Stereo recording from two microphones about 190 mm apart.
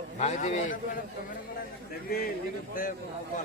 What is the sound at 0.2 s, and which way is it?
Speech, 40° left (ahead or behind).